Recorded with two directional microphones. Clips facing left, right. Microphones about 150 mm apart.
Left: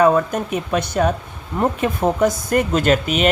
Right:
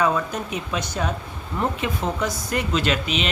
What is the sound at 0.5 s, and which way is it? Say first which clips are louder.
Speech: left 10 dB; 55° left (ahead or behind).